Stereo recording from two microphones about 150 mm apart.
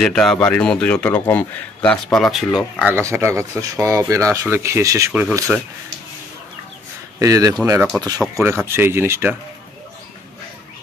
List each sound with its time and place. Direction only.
0.0 s a man's voice: 5° left (ahead or behind)
2.9 s speech: 15° right (ahead or behind)
5.5 s speech: 10° right (ahead or behind)
7.2 s speech: 20° right (ahead or behind)